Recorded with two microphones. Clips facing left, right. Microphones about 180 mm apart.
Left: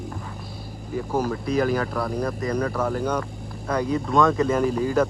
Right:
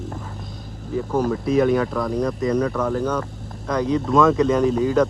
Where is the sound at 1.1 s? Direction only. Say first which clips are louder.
Right 4 dB; 5° left (ahead or behind).